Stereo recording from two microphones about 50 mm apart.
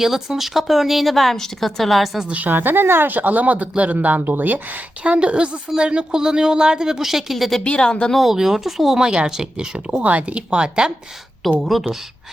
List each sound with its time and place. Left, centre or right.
0.0 s speech: centre
2.2 s speech: right
2.5 s speech: right
3.2 s a man's voice: right
5.0 s speech: right; by 7.6 s centre
7.6 s speech: centre
8.1 s speech: centre
10.0 s speech: right
11.6 s speech: centre